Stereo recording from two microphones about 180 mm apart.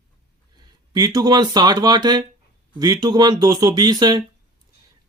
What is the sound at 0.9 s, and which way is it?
Speech, 20° right (ahead or behind).